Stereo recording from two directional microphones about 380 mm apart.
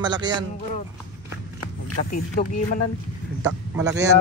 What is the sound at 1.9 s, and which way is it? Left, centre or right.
Speech, left.